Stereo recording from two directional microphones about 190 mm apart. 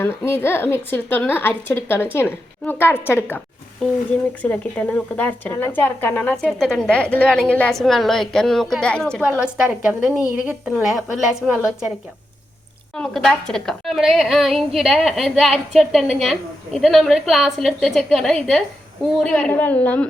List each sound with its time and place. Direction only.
0.0 s a woman's voice: 10° left (ahead or behind); by 11.9 s 5° right (ahead or behind)
13.0 s a woman's voice: 5° left (ahead or behind)